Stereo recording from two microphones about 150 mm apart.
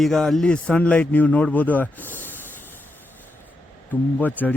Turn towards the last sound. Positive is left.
turn(degrees=10)  # may be behind; listen again after turning